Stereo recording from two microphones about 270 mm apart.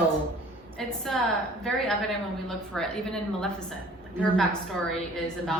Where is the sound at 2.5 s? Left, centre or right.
Centre.